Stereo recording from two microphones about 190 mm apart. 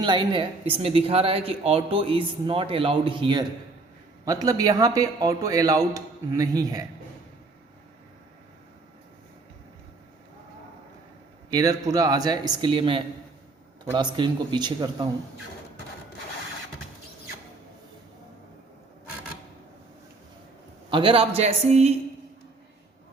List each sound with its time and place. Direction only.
0.0 s speech: 25° right (ahead or behind)
11.5 s speech: 20° right (ahead or behind)
20.9 s a woman's voice: 30° right (ahead or behind)